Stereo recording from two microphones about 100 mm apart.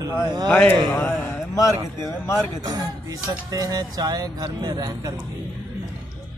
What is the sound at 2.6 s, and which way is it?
A man's voice, 40° right (ahead or behind).